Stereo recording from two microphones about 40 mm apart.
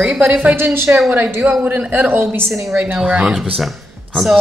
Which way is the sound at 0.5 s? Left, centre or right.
Right.